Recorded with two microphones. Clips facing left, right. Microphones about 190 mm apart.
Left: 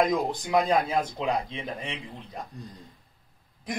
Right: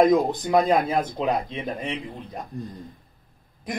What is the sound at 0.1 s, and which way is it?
Speech, 25° right (ahead or behind).